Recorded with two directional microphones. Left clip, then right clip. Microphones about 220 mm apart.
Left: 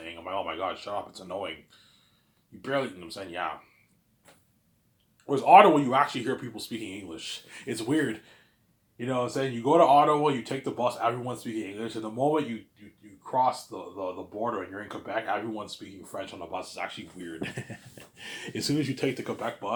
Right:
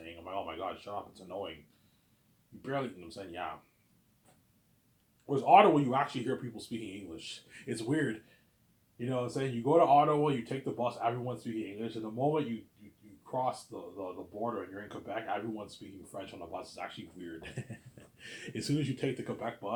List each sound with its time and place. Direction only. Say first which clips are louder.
0.0 s speech: left 7 dB; 25° left (ahead or behind)
2.6 s speech: left 7 dB; 25° left (ahead or behind)
5.2 s speech: left 6 dB; 25° left (ahead or behind)
17.9 s speech: left 7 dB; 10° left (ahead or behind)